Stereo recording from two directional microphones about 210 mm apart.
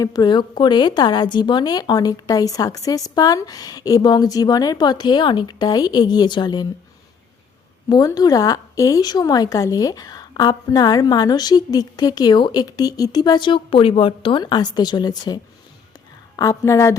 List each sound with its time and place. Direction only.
0.0 s a woman's voice: 20° left (ahead or behind)
7.9 s a woman's voice: 20° left (ahead or behind)